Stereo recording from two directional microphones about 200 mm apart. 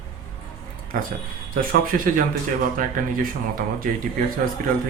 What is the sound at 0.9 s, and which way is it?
A man's voice, 45° right (ahead or behind).